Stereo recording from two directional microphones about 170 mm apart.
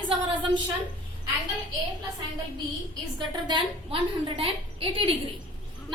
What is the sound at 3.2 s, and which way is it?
A woman's voice, 25° right (ahead or behind).